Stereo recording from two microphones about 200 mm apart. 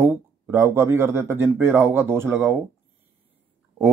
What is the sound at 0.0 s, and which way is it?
Speech, 15° right (ahead or behind).